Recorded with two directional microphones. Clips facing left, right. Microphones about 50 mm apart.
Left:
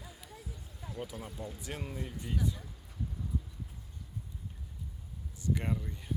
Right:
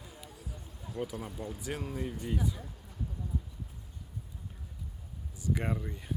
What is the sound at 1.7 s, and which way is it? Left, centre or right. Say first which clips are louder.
Speech: right 5 dB; centre.